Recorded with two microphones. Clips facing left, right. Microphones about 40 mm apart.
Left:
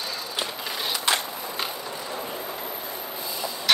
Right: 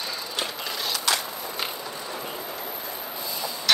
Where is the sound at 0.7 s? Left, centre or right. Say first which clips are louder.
Left 2 dB; left.